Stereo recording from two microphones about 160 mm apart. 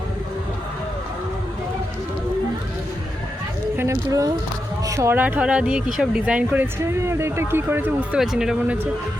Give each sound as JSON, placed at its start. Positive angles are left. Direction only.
{"t": 3.8, "sound": "speech", "side_deg": -20}